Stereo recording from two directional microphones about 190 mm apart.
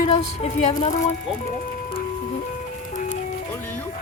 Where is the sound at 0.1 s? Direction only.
35° left (ahead or behind).